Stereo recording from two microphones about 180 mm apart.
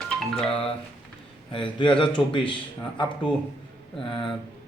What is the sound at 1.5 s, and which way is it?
Speech, 25° left (ahead or behind).